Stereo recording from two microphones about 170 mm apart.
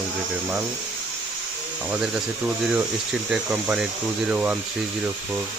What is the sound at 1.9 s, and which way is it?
Speech, 5° right (ahead or behind).